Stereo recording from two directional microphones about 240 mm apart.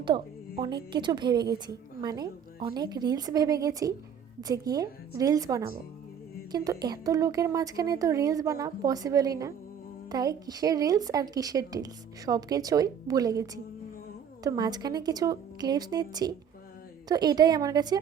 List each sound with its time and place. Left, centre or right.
0.9 s a woman's voice: centre